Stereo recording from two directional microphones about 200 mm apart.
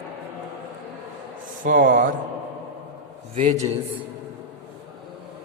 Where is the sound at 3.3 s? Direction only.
35° right (ahead or behind).